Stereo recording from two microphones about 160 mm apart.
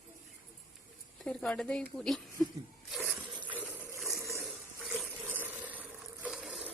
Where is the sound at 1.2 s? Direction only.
5° left (ahead or behind).